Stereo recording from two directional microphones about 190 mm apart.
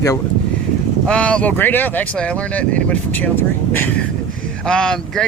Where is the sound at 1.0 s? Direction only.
5° left (ahead or behind).